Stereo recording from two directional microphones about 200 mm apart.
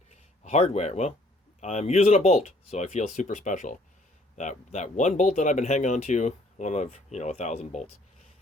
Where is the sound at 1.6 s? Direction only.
35° left (ahead or behind).